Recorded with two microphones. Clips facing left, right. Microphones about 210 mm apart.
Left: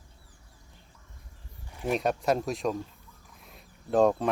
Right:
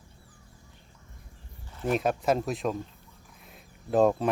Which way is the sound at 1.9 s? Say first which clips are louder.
Right 1 dB; centre (ahead or behind).